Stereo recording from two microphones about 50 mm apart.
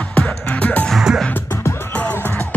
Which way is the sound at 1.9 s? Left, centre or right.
Left.